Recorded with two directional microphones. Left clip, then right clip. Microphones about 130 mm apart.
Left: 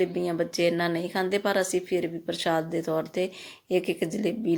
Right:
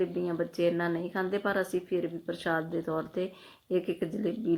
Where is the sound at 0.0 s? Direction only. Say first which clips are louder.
Left 4 dB; 25° left (ahead or behind).